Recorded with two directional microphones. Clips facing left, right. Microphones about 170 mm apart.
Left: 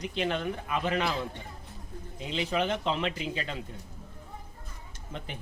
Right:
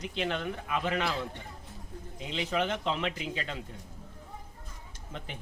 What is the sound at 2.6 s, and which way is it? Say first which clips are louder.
Speech: left 1 dB; 35° left (ahead or behind).